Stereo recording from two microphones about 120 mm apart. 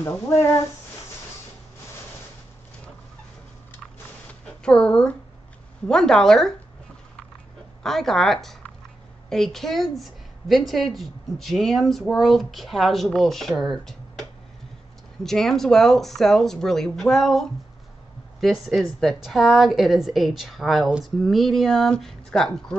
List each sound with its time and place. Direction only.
0.0 s speech: 25° left (ahead or behind)
4.3 s a sound: 10° left (ahead or behind)
5.9 s a woman's voice: 5° left (ahead or behind)
7.8 s a woman's voice: 5° left (ahead or behind)
15.2 s a woman's voice: 5° left (ahead or behind)